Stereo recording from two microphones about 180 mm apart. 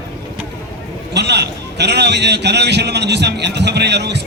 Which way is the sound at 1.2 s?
70° right (ahead or behind).